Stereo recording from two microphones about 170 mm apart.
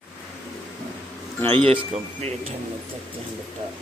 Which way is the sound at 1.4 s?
30° right (ahead or behind).